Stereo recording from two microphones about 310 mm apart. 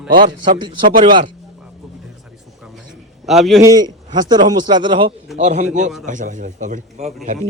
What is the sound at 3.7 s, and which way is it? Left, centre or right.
A man's voice, centre.